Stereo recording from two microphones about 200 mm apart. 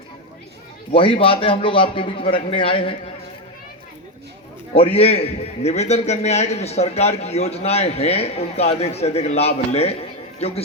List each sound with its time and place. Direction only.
0.9 s a man's voice: 25° left (ahead or behind)
4.7 s a man's voice: 30° left (ahead or behind)